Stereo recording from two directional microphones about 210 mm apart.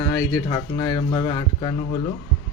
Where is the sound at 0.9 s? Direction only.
20° left (ahead or behind).